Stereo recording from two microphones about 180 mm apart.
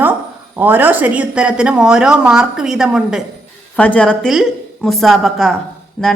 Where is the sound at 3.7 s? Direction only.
10° left (ahead or behind).